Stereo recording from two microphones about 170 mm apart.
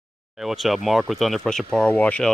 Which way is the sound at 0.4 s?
Centre (ahead or behind).